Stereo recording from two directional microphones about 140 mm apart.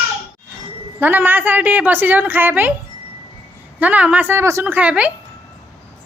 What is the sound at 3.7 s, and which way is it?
A woman's voice, 10° right (ahead or behind).